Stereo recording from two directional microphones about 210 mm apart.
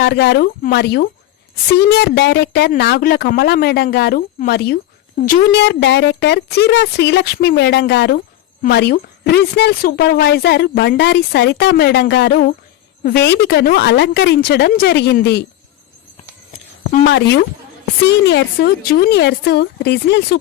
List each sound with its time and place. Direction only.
0.0 s speech: 50° left (ahead or behind)
17.1 s speech: 55° left (ahead or behind)